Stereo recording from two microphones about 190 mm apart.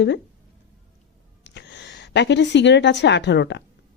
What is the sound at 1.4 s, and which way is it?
A woman's voice, 65° left (ahead or behind).